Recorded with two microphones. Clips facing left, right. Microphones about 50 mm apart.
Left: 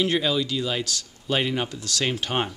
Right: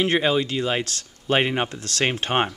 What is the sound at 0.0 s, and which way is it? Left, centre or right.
Speech, right.